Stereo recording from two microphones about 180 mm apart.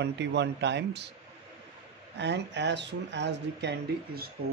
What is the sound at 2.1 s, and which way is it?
Speech, 75° right (ahead or behind).